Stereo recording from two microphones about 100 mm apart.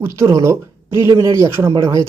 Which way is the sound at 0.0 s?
30° right (ahead or behind).